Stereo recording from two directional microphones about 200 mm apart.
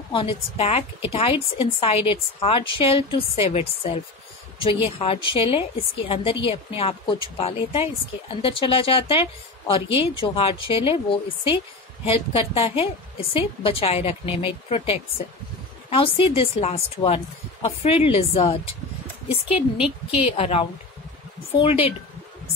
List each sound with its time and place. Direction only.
0.1 s speech: 25° left (ahead or behind)
19.8 s a woman's voice: 5° right (ahead or behind)
20.2 s speech: 30° left (ahead or behind)